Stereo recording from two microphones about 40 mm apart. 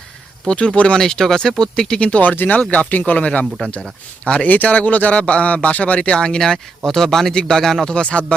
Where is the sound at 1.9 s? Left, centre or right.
Left.